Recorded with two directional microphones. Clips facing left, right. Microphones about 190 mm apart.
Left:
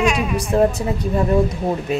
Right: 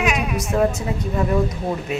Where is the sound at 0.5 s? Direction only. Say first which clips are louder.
Left 3 dB; 35° left (ahead or behind).